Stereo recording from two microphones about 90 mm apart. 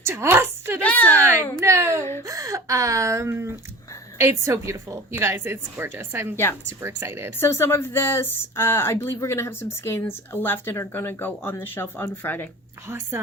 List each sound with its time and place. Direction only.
0.0 s a woman's voice: 30° right (ahead or behind)
0.8 s a woman's voice: 15° left (ahead or behind)
1.6 s a woman's voice: 35° right (ahead or behind)
6.3 s speech: 25° left (ahead or behind)
6.8 s a woman's voice: 30° right (ahead or behind)
7.3 s speech: 30° left (ahead or behind)